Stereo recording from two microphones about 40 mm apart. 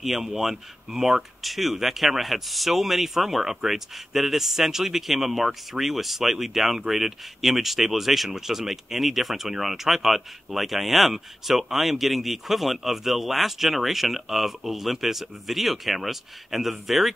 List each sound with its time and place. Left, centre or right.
0.0 s speech: centre
0.9 s speech: right
1.4 s speech: centre